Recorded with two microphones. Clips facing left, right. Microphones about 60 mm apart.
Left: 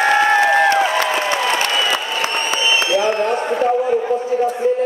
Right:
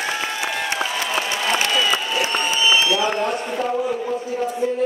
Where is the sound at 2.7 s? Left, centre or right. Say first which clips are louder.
Left 5 dB; left.